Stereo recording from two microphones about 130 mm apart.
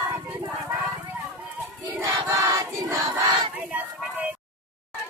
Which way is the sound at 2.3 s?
25° right (ahead or behind).